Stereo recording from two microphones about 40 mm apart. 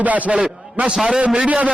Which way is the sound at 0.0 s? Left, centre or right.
Right.